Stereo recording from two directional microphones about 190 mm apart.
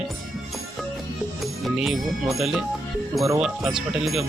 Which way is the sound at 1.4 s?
Centre (ahead or behind).